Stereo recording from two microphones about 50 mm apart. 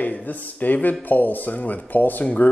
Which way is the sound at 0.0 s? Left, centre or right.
Left.